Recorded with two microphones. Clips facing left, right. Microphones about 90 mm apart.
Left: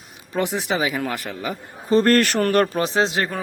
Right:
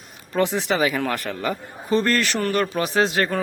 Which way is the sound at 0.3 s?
15° left (ahead or behind).